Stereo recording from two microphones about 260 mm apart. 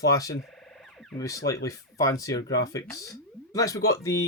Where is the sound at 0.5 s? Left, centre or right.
Centre.